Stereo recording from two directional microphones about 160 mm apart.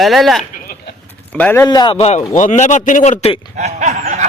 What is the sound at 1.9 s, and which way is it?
A man's voice, 45° left (ahead or behind).